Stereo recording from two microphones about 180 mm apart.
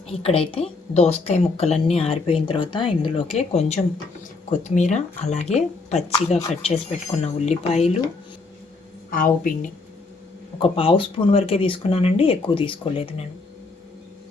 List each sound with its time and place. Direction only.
0.1 s a woman's voice: 30° left (ahead or behind)
9.0 s a woman's voice: 50° left (ahead or behind)
10.6 s a woman's voice: 30° left (ahead or behind)